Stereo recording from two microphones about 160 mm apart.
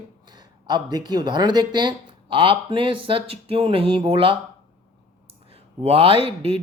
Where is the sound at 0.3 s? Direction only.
25° right (ahead or behind).